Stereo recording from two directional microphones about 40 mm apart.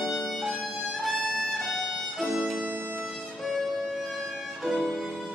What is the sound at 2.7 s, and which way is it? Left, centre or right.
Music, right.